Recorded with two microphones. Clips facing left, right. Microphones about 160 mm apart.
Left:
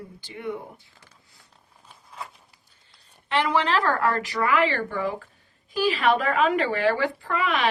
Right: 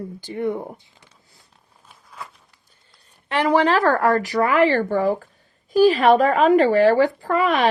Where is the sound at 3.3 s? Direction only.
45° right (ahead or behind).